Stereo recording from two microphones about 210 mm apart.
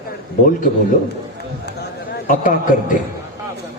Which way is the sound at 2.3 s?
40° left (ahead or behind).